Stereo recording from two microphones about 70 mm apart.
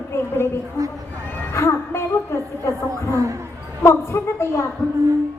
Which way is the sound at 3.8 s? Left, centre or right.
Left.